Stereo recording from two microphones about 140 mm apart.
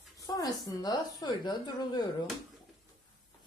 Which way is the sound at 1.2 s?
30° left (ahead or behind).